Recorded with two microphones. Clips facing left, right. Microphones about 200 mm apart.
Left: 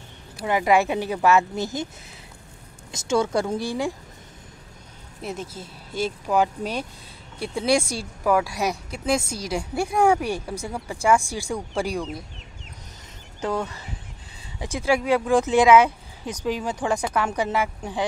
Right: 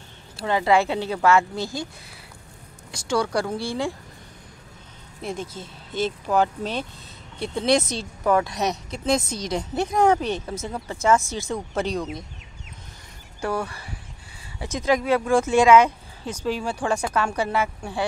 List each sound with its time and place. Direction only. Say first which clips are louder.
0.4 s speech: even; 15° left (ahead or behind)
2.9 s speech: left 2 dB; 20° left (ahead or behind)
5.2 s speech: right 1 dB; 5° left (ahead or behind)
14.6 s speech: even; 10° left (ahead or behind)